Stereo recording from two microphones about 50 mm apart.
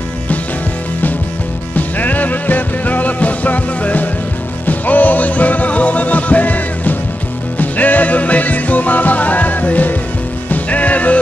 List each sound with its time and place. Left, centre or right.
1.8 s music: left